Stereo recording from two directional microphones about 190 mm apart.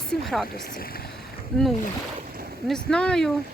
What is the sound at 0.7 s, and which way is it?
Speech, 50° left (ahead or behind).